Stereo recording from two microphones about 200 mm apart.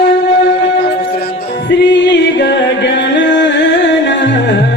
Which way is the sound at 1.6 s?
65° left (ahead or behind).